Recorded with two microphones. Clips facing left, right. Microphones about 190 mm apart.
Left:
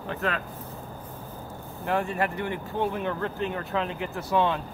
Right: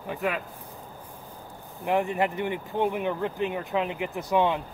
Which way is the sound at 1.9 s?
15° right (ahead or behind).